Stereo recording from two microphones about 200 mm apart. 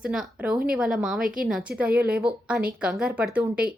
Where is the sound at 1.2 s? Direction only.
45° right (ahead or behind).